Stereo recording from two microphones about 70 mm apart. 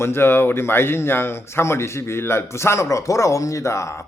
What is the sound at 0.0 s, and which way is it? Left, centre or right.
A man's voice, left.